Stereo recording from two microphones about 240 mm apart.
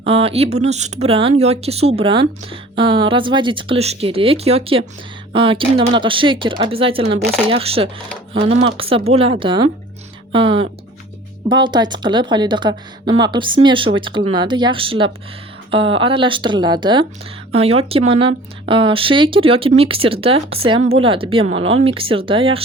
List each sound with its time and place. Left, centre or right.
0.0 s speech: right